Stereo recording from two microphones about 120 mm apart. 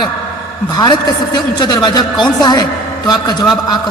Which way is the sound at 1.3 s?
35° left (ahead or behind).